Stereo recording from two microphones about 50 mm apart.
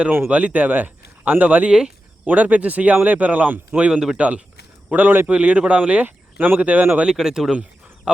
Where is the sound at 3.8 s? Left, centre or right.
Centre; by 5.3 s right.